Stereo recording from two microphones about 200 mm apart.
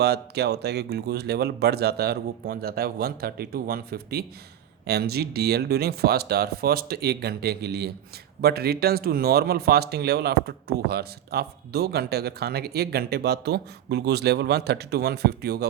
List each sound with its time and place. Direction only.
0.0 s speech: 55° right (ahead or behind)